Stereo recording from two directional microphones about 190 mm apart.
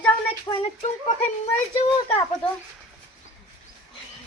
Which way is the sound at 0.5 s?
15° left (ahead or behind).